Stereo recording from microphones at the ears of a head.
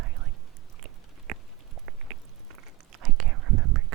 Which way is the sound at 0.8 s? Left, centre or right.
Right.